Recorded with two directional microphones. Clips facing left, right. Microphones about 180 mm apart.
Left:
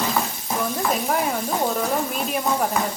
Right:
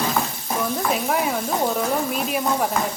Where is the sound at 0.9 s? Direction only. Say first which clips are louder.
Right 1 dB; centre (ahead or behind).